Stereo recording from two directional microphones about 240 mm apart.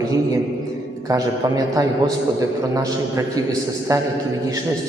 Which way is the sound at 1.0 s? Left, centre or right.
Centre.